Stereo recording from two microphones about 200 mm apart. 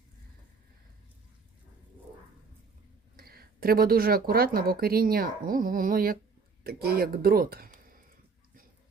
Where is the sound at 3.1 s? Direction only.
50° right (ahead or behind).